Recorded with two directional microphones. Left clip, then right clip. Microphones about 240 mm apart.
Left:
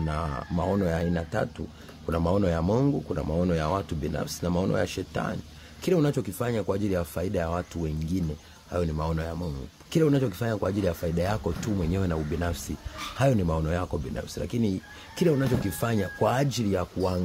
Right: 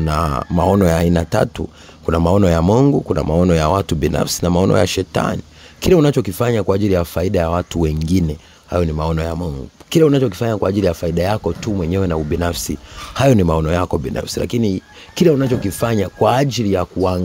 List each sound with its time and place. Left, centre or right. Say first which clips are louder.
0.0 s speech: right 13 dB; right